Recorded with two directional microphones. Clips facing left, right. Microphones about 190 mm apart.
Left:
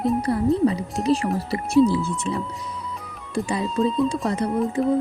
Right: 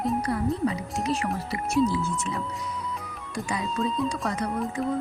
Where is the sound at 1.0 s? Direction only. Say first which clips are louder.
Left 8 dB; 30° left (ahead or behind).